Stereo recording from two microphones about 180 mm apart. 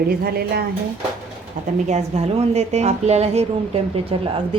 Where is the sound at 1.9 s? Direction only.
35° right (ahead or behind).